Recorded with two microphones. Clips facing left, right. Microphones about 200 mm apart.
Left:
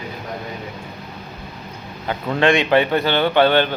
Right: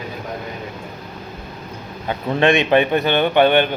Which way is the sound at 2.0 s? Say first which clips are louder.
Right 1 dB; 20° right (ahead or behind).